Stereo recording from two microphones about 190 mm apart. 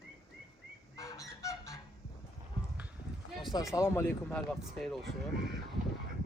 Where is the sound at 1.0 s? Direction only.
15° left (ahead or behind).